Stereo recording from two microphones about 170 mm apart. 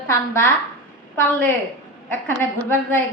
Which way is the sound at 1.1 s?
15° left (ahead or behind).